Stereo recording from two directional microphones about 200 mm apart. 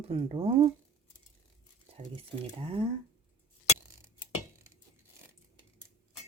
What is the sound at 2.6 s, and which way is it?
Speech, 30° right (ahead or behind).